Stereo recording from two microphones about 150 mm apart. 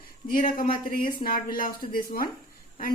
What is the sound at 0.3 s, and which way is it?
A woman's voice, 65° left (ahead or behind).